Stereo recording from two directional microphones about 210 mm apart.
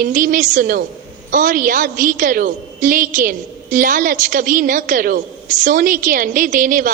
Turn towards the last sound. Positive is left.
turn(degrees=-40)  # may be behind; listen again after turning